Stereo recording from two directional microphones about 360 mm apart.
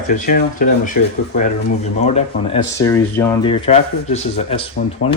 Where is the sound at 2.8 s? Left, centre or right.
Centre.